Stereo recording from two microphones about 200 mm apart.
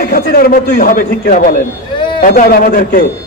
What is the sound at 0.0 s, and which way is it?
A man's voice, 45° left (ahead or behind).